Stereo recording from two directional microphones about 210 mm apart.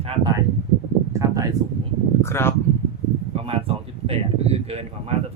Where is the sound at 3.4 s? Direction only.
25° right (ahead or behind).